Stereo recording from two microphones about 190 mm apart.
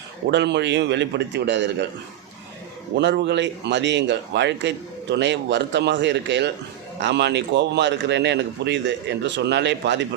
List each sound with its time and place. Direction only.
0.3 s a man's voice: 65° right (ahead or behind)
2.9 s a man's voice: 65° right (ahead or behind)